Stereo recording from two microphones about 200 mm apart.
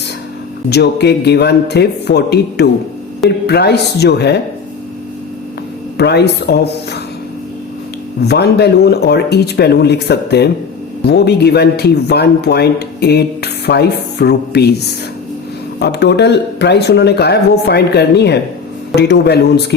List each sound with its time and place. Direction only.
0.7 s speech: 55° left (ahead or behind)
6.0 s speech: 55° left (ahead or behind)
8.2 s speech: 55° left (ahead or behind)
15.8 s speech: 55° left (ahead or behind)